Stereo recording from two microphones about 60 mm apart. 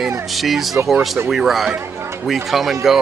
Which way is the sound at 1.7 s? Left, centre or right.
Right.